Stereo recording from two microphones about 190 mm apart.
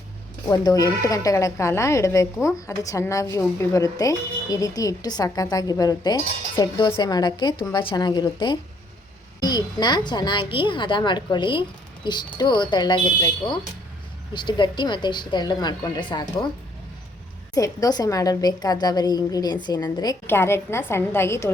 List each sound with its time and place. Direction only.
0.4 s a woman's voice: 20° left (ahead or behind)
17.5 s a woman's voice: 20° left (ahead or behind)